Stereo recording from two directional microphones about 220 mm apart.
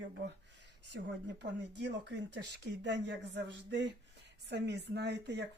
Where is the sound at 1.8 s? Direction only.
50° right (ahead or behind).